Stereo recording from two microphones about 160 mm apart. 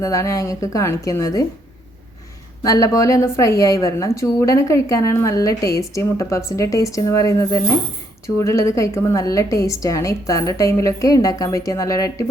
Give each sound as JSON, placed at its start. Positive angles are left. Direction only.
{"t": 0.0, "sound": "a woman's voice", "side_deg": 20}
{"t": 2.6, "sound": "a woman's voice", "side_deg": 20}